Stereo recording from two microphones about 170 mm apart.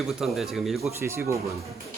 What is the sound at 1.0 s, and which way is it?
Speech, 15° right (ahead or behind).